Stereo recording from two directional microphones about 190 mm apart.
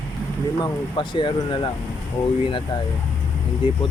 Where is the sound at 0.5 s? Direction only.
25° left (ahead or behind).